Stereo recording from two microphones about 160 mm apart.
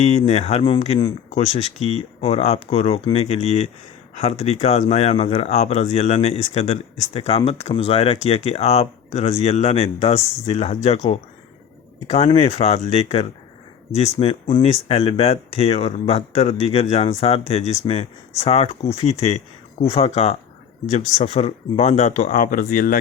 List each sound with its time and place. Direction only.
0.0 s speech: 45° left (ahead or behind)